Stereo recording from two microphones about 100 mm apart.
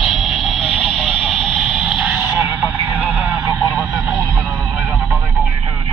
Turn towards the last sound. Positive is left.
turn(degrees=-30)  # may be behind; listen again after turning